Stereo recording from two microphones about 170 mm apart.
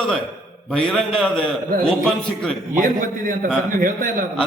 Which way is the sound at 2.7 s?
55° right (ahead or behind).